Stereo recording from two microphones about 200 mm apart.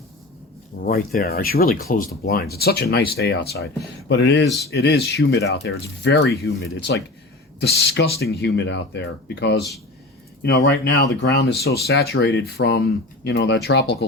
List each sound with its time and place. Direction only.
0.8 s speech: 50° left (ahead or behind)
10.6 s speech: 75° left (ahead or behind)
11.0 s speech: 55° left (ahead or behind)